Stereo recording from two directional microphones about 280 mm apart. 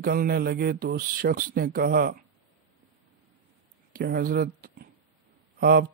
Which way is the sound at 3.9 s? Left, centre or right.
Right.